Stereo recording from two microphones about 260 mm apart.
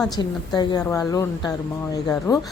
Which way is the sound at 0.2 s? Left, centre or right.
Centre.